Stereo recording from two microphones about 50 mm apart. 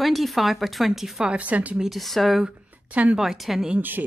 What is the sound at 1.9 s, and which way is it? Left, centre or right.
Speech, centre.